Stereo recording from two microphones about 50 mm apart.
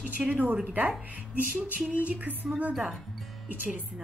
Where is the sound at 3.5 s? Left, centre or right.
Right.